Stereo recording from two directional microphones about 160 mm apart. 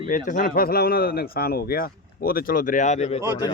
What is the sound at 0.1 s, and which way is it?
Speech, 55° left (ahead or behind).